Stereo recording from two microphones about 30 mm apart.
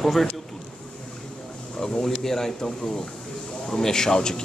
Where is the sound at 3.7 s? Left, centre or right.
Centre.